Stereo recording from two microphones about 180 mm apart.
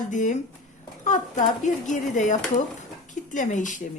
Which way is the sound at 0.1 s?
45° left (ahead or behind).